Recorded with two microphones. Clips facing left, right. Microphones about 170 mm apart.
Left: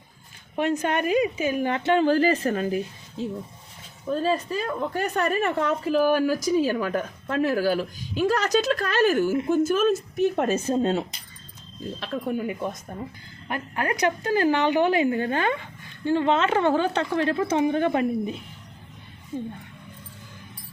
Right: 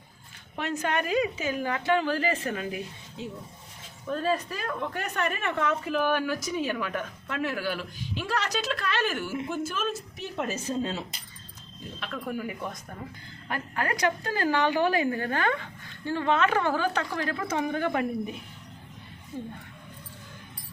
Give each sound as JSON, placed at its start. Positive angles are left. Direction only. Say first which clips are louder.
{"t": 0.5, "sound": "a woman's voice", "louder": "left 5 dB", "side_deg": 15}
{"t": 11.9, "sound": "speech", "louder": "left 5 dB", "side_deg": 30}